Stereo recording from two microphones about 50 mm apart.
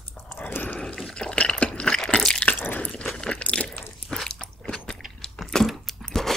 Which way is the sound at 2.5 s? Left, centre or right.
Left.